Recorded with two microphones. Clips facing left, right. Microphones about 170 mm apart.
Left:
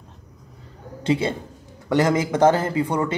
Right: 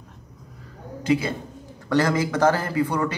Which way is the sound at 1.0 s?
25° left (ahead or behind).